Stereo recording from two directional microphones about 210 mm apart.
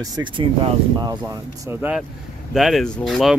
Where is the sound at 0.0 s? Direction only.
20° right (ahead or behind).